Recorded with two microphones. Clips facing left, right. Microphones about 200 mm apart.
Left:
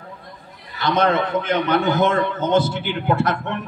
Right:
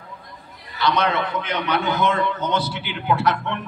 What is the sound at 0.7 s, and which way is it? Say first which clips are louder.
A man's voice: left 3 dB; 50° left (ahead or behind).